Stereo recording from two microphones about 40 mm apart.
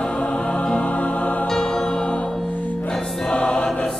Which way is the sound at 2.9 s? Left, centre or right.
Centre.